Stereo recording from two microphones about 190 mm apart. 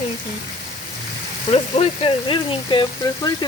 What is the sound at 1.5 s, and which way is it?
Speech, 30° left (ahead or behind).